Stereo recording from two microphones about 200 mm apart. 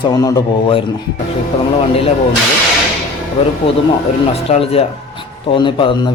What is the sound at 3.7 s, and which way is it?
A man's voice, 30° left (ahead or behind).